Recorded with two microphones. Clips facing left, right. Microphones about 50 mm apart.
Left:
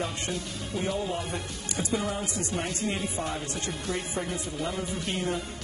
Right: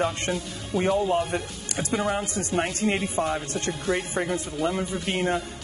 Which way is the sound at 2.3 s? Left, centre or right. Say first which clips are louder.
Right 5 dB; right.